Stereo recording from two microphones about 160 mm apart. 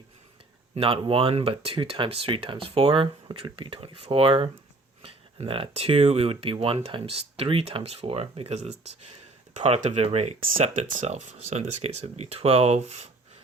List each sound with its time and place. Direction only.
0.8 s speech: 35° right (ahead or behind)